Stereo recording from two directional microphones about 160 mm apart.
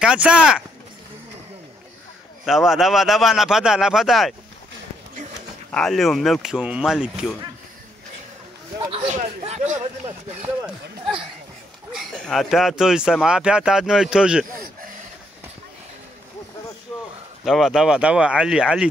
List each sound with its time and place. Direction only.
0.0 s speech: 5° right (ahead or behind)
2.4 s speech: centre (ahead or behind)
5.7 s speech: 5° left (ahead or behind)
8.7 s a man's voice: 35° right (ahead or behind)
9.1 s speech: 45° right (ahead or behind)
11.9 s speech: centre (ahead or behind)
17.5 s speech: centre (ahead or behind)